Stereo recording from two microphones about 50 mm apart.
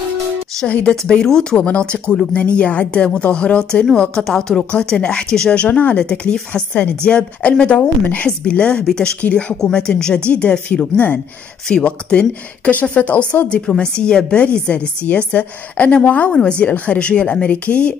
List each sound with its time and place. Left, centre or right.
0.7 s a woman's voice: left
1.2 s speech: centre
1.6 s a woman's voice: left
5.6 s a woman's voice: left
5.9 s a woman's voice: centre